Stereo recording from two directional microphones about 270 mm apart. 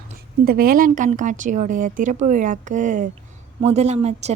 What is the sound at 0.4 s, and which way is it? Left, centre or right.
A woman's voice, right.